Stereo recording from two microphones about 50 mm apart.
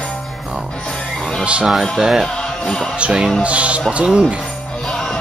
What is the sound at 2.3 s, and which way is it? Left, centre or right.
Music, centre.